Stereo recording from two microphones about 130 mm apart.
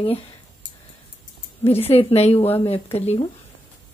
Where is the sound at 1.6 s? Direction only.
50° left (ahead or behind).